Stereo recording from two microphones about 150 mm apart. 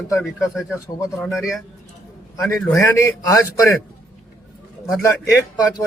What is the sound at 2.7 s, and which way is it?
Speech, 15° left (ahead or behind).